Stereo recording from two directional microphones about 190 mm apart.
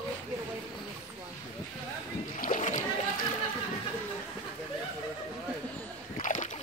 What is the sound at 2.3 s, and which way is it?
Splash, 40° left (ahead or behind).